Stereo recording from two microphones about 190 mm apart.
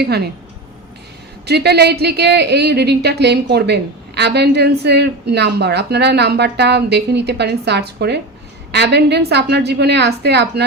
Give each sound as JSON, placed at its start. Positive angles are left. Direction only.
{"t": 0.0, "sound": "speech", "side_deg": -55}
{"t": 1.5, "sound": "speech", "side_deg": -60}